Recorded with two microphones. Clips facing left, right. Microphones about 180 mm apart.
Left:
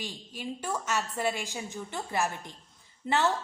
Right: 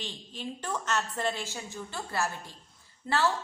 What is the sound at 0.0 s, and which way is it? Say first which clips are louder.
A woman's voice: left 1 dB; 10° left (ahead or behind).